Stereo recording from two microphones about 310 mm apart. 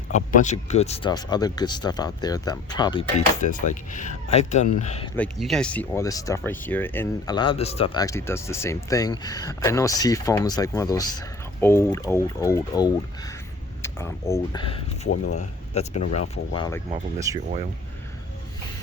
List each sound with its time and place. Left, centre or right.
0.3 s speech: left
5.1 s speech: centre
17.3 s speech: centre